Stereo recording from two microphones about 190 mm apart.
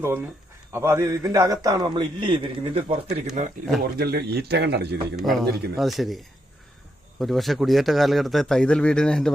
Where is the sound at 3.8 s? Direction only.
55° right (ahead or behind).